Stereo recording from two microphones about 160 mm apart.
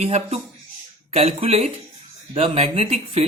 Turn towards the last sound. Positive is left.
turn(degrees=-40)  # may be behind; listen again after turning